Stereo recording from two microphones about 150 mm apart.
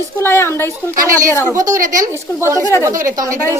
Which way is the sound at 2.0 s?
20° right (ahead or behind).